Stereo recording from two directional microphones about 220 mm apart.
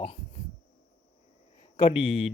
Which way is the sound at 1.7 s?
25° left (ahead or behind).